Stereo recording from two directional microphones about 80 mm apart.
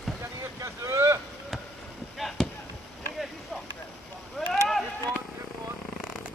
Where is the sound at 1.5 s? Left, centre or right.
Centre.